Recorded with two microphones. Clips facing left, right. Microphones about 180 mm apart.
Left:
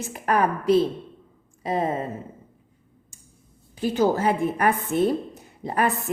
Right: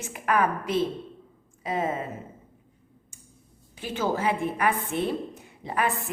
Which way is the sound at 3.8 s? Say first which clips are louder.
Left 6 dB; 40° left (ahead or behind).